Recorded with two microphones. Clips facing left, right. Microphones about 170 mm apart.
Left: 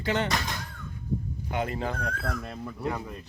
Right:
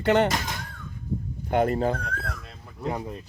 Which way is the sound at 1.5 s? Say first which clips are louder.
Right 8 dB; 45° right (ahead or behind).